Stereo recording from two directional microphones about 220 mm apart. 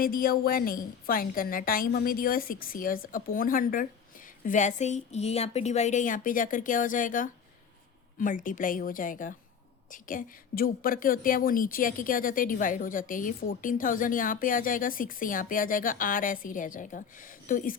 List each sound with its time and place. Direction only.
0.0 s a woman's voice: 40° left (ahead or behind)